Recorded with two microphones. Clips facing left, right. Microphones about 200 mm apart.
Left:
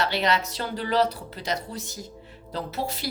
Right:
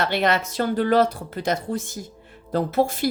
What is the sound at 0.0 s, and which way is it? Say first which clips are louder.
A woman's voice: right 3 dB; 55° right (ahead or behind).